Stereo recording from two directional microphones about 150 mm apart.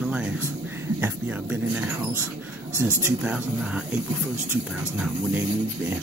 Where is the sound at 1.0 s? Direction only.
10° right (ahead or behind).